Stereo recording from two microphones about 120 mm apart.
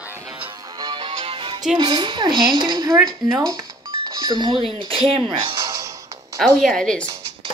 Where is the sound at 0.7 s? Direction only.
40° right (ahead or behind).